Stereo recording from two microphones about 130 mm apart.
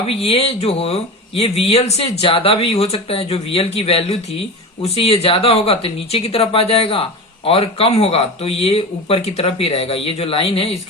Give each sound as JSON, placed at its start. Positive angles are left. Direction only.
{"t": 0.1, "sound": "speech", "side_deg": 50}